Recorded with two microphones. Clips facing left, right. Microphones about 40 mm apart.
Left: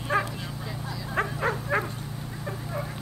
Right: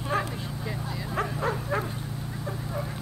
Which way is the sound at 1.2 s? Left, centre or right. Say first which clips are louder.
Left 2 dB; left.